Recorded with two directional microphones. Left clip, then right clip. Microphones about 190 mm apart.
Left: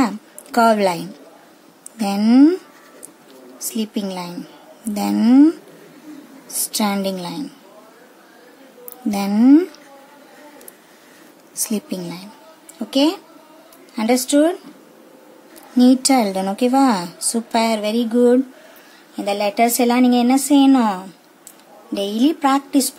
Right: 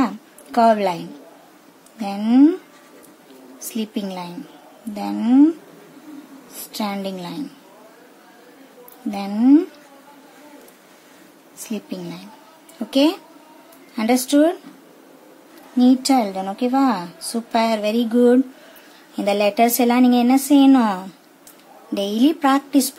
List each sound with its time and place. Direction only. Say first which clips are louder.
0.0 s a woman's voice: left 2 dB; 20° left (ahead or behind)
3.5 s a woman's voice: left 2 dB; 15° left (ahead or behind)
4.9 s a woman's voice: left 3 dB; 25° left (ahead or behind)
6.7 s a woman's voice: left 5 dB; 20° left (ahead or behind)
9.1 s a woman's voice: left 2 dB; 20° left (ahead or behind)
11.7 s a woman's voice: left 1 dB; 20° left (ahead or behind)
12.7 s a woman's voice: even; 5° left (ahead or behind)
15.8 s a woman's voice: left 2 dB; 25° left (ahead or behind); by 22.9 s centre (ahead or behind)